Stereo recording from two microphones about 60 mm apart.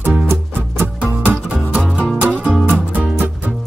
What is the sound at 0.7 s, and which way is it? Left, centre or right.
Music, right.